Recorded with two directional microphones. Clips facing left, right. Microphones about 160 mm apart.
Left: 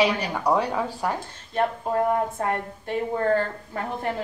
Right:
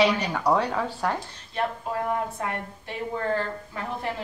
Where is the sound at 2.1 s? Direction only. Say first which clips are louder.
Left 4 dB; 40° left (ahead or behind).